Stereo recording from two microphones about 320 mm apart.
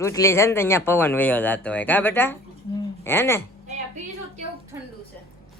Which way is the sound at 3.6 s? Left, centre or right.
Right.